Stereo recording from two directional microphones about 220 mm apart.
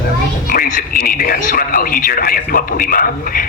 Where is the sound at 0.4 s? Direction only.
40° left (ahead or behind).